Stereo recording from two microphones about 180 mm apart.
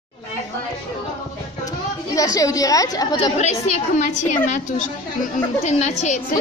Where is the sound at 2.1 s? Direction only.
20° left (ahead or behind).